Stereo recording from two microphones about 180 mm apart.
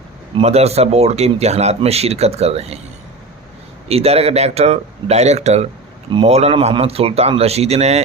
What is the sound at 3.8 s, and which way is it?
Speech, 35° right (ahead or behind).